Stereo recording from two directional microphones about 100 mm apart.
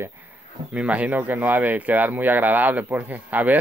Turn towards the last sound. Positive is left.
turn(degrees=-15)  # may be behind; listen again after turning